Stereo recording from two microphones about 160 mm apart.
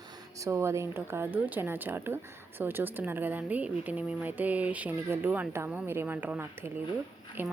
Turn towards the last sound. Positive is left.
turn(degrees=-10)  # may be behind; listen again after turning